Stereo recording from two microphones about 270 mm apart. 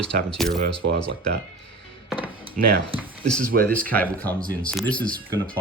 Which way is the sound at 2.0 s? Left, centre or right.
Centre.